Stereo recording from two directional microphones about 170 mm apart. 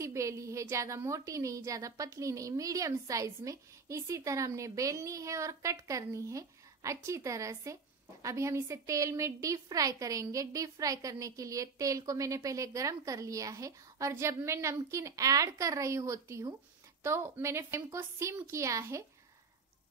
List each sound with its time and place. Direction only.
0.0 s a woman's voice: 15° right (ahead or behind)